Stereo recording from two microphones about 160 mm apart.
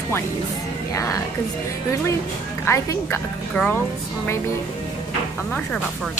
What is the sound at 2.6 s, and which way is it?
Speech, 15° left (ahead or behind).